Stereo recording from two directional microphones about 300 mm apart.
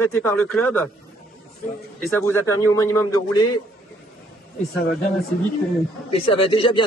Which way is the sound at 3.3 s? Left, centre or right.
Left.